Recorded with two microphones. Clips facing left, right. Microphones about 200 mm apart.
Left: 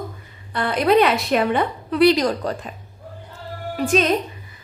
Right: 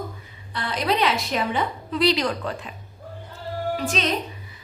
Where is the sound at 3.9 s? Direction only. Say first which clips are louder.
Left 12 dB; 50° left (ahead or behind).